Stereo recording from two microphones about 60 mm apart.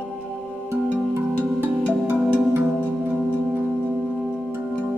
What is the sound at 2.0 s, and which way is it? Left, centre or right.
Music, right.